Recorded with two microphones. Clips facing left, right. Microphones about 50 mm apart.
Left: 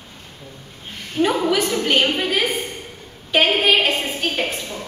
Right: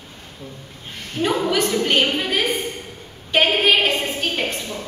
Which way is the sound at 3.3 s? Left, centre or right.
Centre.